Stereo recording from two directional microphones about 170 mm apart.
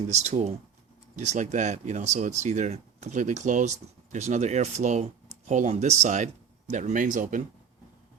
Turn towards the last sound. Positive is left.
turn(degrees=-50)  # may be behind; listen again after turning